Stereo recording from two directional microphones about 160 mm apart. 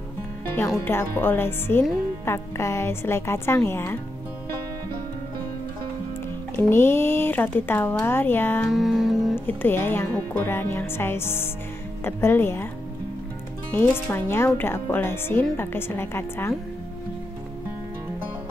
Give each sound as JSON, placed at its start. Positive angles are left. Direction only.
{"t": 0.8, "sound": "speech", "side_deg": 15}
{"t": 6.5, "sound": "speech", "side_deg": 15}
{"t": 8.6, "sound": "music", "side_deg": 0}
{"t": 9.5, "sound": "speech", "side_deg": 15}
{"t": 13.7, "sound": "speech", "side_deg": 15}